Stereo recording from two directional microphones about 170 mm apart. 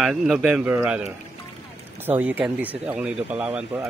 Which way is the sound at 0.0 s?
5° right (ahead or behind).